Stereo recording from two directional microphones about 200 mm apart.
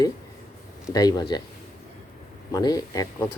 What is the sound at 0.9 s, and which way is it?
Speech, 20° left (ahead or behind).